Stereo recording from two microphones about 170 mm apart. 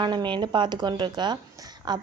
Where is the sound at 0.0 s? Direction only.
25° right (ahead or behind).